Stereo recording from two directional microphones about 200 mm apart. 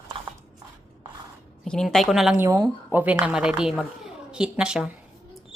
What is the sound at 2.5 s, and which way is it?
A woman's voice, 15° right (ahead or behind).